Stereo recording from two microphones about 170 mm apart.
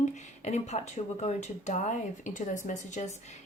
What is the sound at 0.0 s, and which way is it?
Speech, 40° left (ahead or behind).